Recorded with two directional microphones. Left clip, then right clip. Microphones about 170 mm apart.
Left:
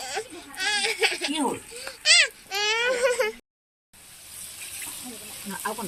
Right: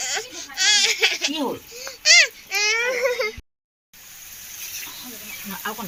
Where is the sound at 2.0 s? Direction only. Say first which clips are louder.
Right 4 dB; 60° left (ahead or behind).